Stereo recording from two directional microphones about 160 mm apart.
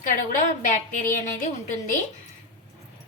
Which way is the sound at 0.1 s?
55° left (ahead or behind).